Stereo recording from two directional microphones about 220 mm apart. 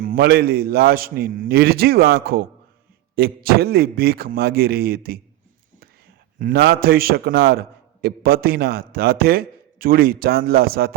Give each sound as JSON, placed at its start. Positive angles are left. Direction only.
{"t": 0.0, "sound": "a man's voice", "side_deg": -40}
{"t": 6.4, "sound": "a man's voice", "side_deg": -45}